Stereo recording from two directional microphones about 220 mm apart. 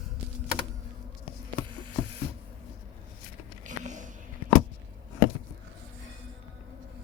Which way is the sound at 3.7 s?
35° right (ahead or behind).